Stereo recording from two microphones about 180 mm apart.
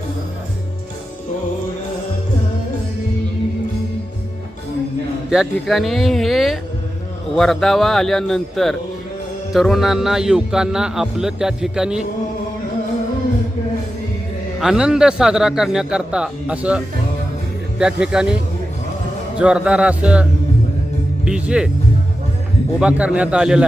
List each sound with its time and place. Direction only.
5.3 s a man's voice: centre (ahead or behind)
14.6 s a man's voice: 5° right (ahead or behind)
19.4 s speech: 5° right (ahead or behind)
21.2 s a man's voice: 5° right (ahead or behind)
22.8 s a man's voice: 5° right (ahead or behind)